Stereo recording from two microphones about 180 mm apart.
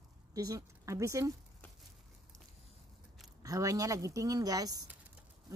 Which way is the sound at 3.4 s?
20° right (ahead or behind).